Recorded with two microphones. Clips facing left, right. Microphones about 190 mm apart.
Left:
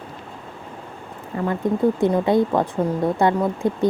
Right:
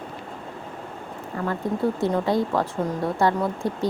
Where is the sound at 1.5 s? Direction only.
15° left (ahead or behind).